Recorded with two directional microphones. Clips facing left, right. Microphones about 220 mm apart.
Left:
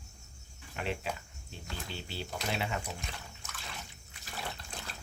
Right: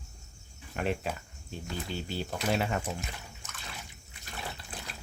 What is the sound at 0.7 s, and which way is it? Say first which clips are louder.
Speech: right 5 dB; 50° right (ahead or behind).